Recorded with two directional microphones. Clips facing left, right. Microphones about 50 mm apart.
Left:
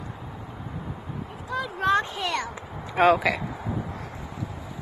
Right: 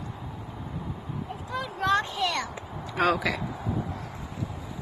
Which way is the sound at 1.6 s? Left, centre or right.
Left.